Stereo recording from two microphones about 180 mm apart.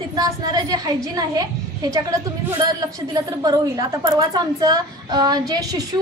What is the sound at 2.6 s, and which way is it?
A woman's voice, 20° right (ahead or behind).